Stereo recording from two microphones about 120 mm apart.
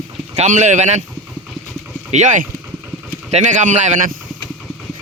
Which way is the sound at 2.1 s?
85° right.